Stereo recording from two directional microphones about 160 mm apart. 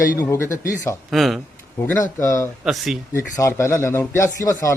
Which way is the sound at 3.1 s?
15° left (ahead or behind).